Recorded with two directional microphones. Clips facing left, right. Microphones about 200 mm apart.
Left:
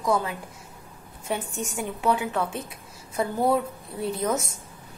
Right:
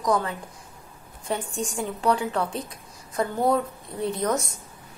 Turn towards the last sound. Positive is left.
turn(degrees=5)  # may be behind; listen again after turning